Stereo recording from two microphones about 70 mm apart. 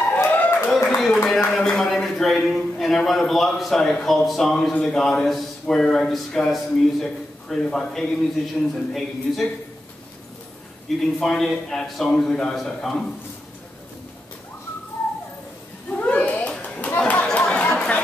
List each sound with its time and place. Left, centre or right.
0.2 s a sound: left
0.8 s a sound: centre
1.2 s speech: centre
11.0 s speech: centre
15.9 s children playing: left
17.1 s chatter: centre